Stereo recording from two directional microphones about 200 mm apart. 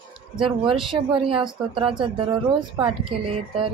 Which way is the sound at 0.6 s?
25° right (ahead or behind).